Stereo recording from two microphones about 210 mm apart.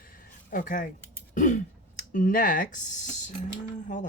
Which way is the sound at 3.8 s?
35° left (ahead or behind).